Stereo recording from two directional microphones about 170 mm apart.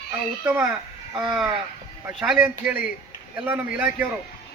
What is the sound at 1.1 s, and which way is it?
Speech, 5° right (ahead or behind).